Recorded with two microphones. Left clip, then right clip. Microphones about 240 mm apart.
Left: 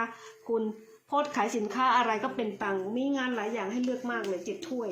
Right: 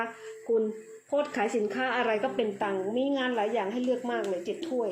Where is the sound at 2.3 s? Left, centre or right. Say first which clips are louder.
Right 2 dB; left.